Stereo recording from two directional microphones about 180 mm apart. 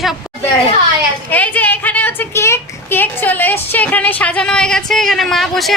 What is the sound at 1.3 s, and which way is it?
A woman's voice, 10° left (ahead or behind).